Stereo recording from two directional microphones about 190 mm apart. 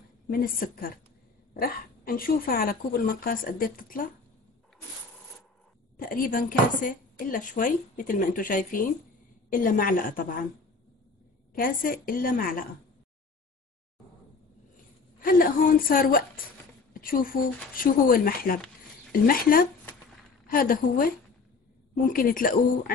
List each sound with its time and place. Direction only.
0.3 s speech: 50° left (ahead or behind)
5.9 s speech: 50° left (ahead or behind)
11.5 s speech: 50° left (ahead or behind)
15.1 s speech: 50° left (ahead or behind)